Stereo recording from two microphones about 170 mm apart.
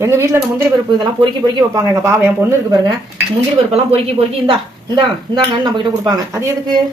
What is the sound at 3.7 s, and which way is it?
Speech, 35° right (ahead or behind).